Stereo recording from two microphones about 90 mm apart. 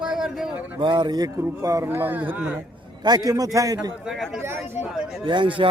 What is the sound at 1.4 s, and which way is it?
A man's voice, 35° right (ahead or behind).